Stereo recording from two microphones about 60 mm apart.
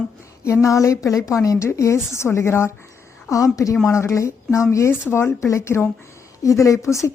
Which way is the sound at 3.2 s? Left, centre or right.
Left.